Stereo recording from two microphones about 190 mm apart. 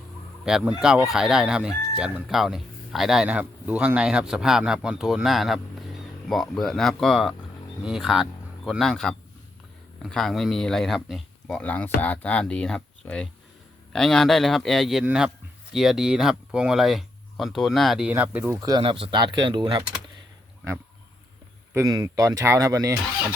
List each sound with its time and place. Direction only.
0.4 s speech: 5° right (ahead or behind)
18.7 s speech: 30° right (ahead or behind)
21.7 s speech: 15° right (ahead or behind)